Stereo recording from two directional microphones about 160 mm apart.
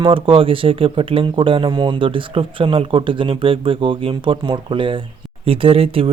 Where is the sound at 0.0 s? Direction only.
35° right (ahead or behind).